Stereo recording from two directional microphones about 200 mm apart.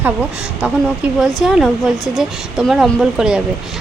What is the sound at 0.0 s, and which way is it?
Speech, 10° right (ahead or behind).